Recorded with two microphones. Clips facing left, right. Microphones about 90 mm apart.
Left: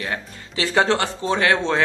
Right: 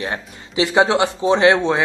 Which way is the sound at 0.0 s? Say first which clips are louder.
Right 2 dB; 20° right (ahead or behind).